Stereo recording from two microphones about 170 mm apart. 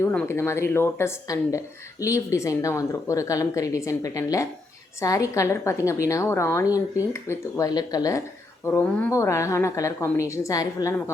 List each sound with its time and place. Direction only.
0.0 s speech: 10° left (ahead or behind)